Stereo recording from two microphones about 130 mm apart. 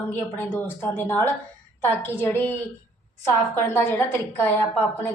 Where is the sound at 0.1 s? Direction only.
15° left (ahead or behind).